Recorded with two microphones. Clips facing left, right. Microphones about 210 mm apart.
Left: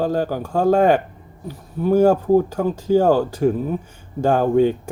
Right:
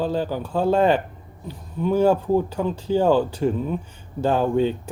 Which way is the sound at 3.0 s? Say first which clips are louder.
Left 1 dB; 45° left (ahead or behind).